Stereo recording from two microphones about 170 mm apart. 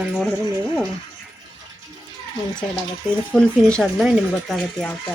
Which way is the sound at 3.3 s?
5° left (ahead or behind).